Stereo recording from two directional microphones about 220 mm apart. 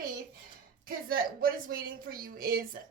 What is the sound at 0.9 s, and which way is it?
A woman's voice, 40° right (ahead or behind).